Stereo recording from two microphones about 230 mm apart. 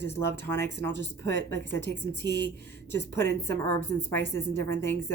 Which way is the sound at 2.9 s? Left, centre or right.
Centre.